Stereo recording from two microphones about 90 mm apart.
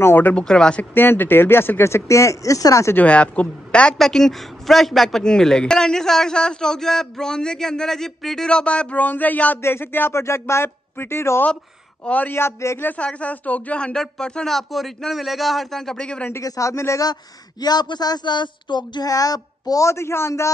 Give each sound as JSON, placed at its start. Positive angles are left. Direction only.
{"t": 0.0, "sound": "a woman's voice", "side_deg": 20}
{"t": 0.9, "sound": "speech", "side_deg": 25}
{"t": 3.0, "sound": "a woman's voice", "side_deg": 15}
{"t": 12.0, "sound": "a woman's voice", "side_deg": 15}
{"t": 12.4, "sound": "a man's voice", "side_deg": 30}
{"t": 12.7, "sound": "speech", "side_deg": 20}
{"t": 16.3, "sound": "a man's voice", "side_deg": 35}
{"t": 17.1, "sound": "speech", "side_deg": 50}